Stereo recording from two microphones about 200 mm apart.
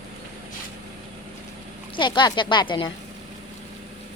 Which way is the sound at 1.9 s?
25° left (ahead or behind).